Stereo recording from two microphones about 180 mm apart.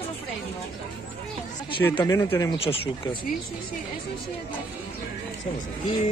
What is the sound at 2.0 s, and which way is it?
Speech, 15° left (ahead or behind).